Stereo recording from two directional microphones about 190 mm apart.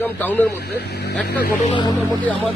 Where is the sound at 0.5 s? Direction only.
60° left (ahead or behind).